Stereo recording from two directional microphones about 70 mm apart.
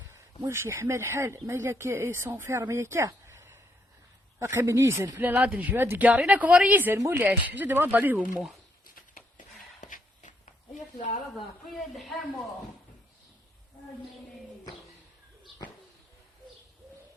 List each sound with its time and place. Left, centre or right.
0.1 s speech: right
4.6 s speech: right
5.1 s speech: right
11.7 s a man's voice: centre